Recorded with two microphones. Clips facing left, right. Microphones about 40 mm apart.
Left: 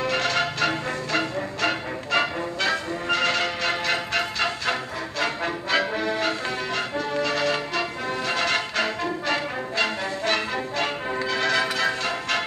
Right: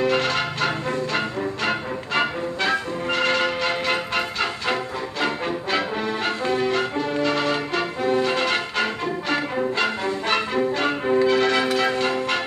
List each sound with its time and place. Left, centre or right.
0.0 s music: right
11.1 s change ringing: centre
11.4 s change ringing: centre